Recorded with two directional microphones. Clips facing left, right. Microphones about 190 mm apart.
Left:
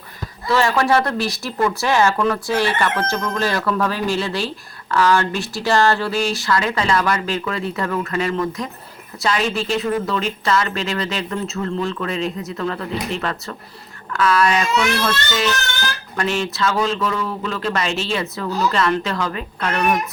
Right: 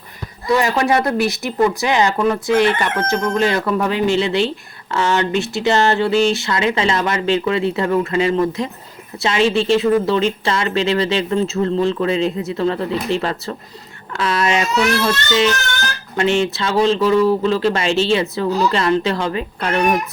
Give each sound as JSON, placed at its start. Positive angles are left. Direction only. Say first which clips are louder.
{"t": 0.4, "sound": "speech", "louder": "right 1 dB", "side_deg": -20}